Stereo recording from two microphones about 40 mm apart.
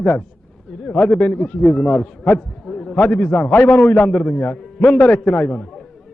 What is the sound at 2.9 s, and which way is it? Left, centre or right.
A man's voice, left.